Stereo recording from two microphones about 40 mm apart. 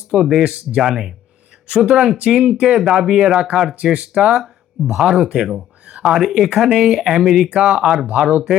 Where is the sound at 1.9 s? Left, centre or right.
Right.